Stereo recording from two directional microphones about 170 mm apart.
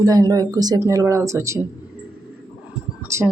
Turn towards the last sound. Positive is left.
turn(degrees=-15)  # may be behind; listen again after turning